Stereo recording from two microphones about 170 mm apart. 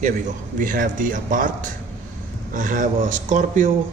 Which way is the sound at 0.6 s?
50° right (ahead or behind).